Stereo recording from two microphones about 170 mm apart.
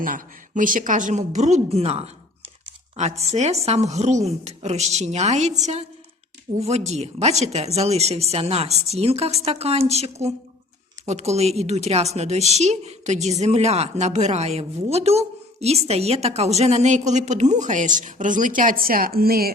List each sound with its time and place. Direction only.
0.0 s a woman's voice: 55° right (ahead or behind)